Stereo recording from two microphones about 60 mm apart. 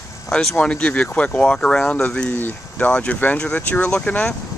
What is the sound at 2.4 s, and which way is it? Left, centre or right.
Speech, left.